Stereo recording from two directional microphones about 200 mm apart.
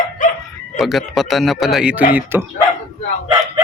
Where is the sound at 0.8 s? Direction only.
Centre (ahead or behind).